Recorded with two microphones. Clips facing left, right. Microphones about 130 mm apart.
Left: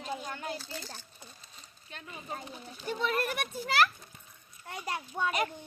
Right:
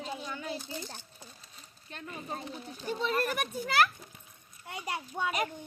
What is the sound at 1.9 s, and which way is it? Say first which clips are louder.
A child's voice: right 2 dB; 35° right (ahead or behind).